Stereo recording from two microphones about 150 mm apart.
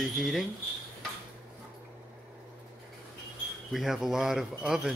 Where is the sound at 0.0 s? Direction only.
Centre (ahead or behind).